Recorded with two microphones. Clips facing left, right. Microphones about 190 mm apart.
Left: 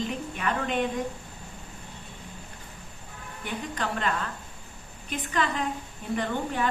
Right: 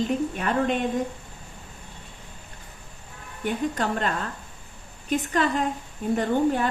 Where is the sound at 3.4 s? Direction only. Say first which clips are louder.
Right 7 dB; 40° right (ahead or behind).